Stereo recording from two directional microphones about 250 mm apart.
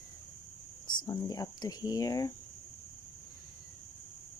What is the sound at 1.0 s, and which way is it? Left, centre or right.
Speech, centre.